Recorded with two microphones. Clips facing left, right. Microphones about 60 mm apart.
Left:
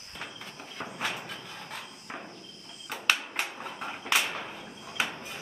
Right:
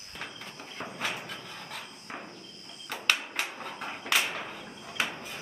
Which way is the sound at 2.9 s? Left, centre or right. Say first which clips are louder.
Left 1 dB; centre.